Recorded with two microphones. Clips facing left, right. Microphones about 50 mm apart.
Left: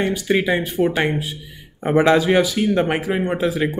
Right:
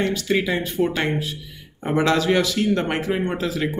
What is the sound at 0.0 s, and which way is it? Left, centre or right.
A man's voice, centre.